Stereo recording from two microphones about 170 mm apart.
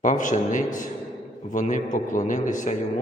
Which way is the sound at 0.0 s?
50° left (ahead or behind).